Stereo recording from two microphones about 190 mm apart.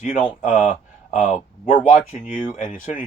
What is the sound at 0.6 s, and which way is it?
Speech, 45° left (ahead or behind).